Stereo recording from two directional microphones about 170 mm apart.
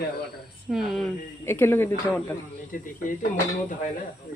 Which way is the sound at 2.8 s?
50° left (ahead or behind).